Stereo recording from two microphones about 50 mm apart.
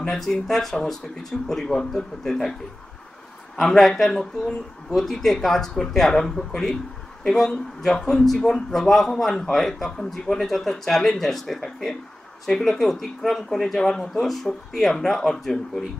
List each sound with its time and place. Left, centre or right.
0.1 s a man's voice: centre
3.6 s a man's voice: centre